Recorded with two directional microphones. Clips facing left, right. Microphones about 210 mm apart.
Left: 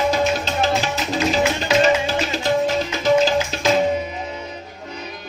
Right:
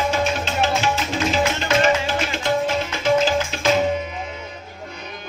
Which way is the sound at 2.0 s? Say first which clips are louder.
Left 2 dB; 40° left (ahead or behind).